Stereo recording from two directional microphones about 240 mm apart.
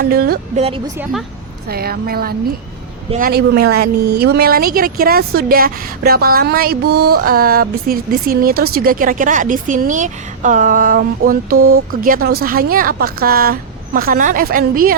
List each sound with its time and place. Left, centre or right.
0.0 s speech: right
1.6 s speech: right